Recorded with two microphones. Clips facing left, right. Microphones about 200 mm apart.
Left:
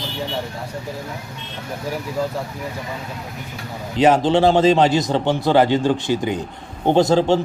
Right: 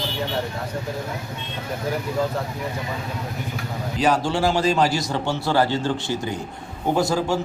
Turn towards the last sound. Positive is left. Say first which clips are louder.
# left 6 dB
turn(degrees=20)  # may be behind; listen again after turning